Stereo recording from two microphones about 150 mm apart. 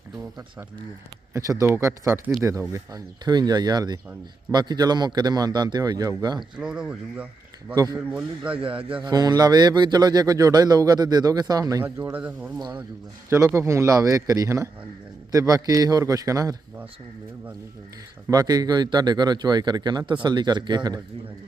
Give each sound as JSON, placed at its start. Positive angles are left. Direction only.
{"t": 1.3, "sound": "a man's voice", "side_deg": -20}
{"t": 6.6, "sound": "a man's voice", "side_deg": -5}
{"t": 8.5, "sound": "a man's voice", "side_deg": -35}
{"t": 18.3, "sound": "a man's voice", "side_deg": -25}